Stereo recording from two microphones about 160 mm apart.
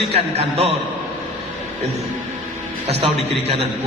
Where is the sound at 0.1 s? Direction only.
40° right (ahead or behind).